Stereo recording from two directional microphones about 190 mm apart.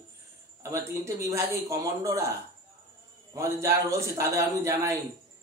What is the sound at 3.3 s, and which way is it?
Speech, 15° right (ahead or behind).